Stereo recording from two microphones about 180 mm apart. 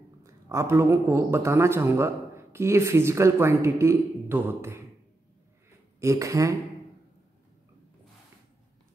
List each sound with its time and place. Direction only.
0.2 s a man's voice: 15° right (ahead or behind)
5.9 s a man's voice: 15° right (ahead or behind)